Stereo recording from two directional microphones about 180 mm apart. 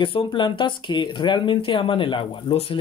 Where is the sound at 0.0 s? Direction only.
30° left (ahead or behind).